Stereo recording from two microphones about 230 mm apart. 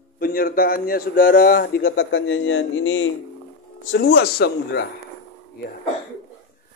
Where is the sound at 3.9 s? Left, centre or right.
Left.